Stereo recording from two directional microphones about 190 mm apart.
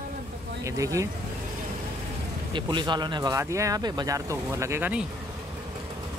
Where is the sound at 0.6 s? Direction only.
15° right (ahead or behind).